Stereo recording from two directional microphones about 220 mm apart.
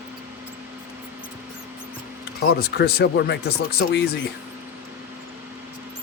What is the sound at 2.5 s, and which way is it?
Speech, 45° left (ahead or behind).